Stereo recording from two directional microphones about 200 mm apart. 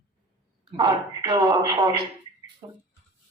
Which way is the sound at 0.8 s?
20° right (ahead or behind).